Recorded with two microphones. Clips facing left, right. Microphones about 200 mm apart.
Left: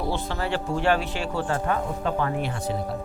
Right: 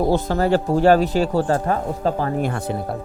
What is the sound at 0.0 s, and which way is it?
A man's voice, 40° right (ahead or behind).